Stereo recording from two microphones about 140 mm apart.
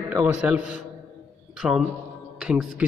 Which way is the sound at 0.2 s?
10° right (ahead or behind).